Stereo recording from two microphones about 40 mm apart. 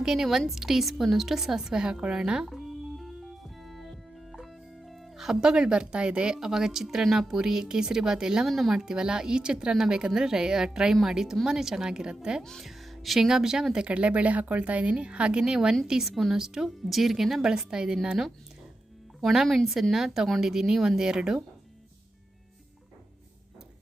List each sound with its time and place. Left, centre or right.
0.0 s a woman's voice: centre
2.5 s music: centre
6.8 s a woman's voice: centre
8.4 s speech: centre
8.7 s a woman's voice: centre
12.6 s music: centre
13.1 s a woman's voice: centre
13.7 s speech: right
16.0 s a woman's voice: centre
19.2 s a woman's voice: centre